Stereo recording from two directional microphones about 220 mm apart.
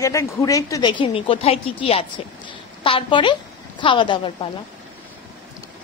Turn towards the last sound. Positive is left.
turn(degrees=20)  # may be behind; listen again after turning